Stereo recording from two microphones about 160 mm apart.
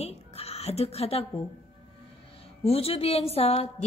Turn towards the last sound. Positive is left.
turn(degrees=40)  # may be behind; listen again after turning